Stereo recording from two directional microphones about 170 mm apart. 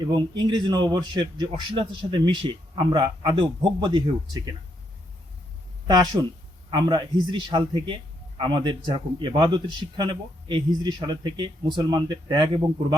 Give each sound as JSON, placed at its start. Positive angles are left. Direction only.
{"t": 0.1, "sound": "a man's voice", "side_deg": -25}
{"t": 6.2, "sound": "a man's voice", "side_deg": -20}